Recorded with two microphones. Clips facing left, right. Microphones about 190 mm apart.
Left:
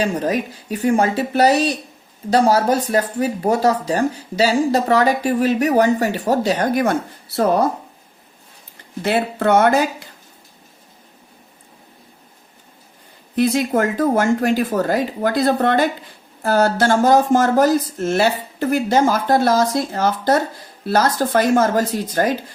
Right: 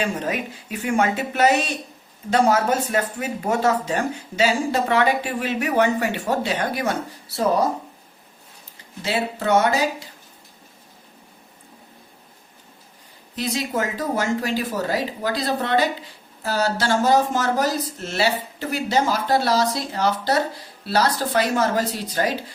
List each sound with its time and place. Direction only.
0.0 s speech: 40° left (ahead or behind)
9.0 s speech: 55° left (ahead or behind)
13.3 s speech: 55° left (ahead or behind)